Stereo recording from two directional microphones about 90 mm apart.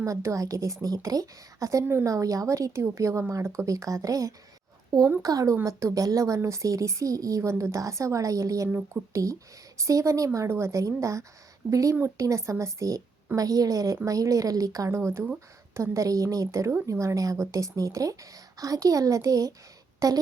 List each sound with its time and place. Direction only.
0.0 s speech: 35° right (ahead or behind)